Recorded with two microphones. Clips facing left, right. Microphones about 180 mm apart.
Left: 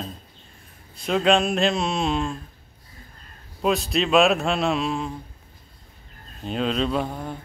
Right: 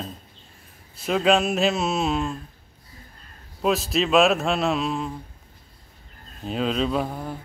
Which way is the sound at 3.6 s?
Centre (ahead or behind).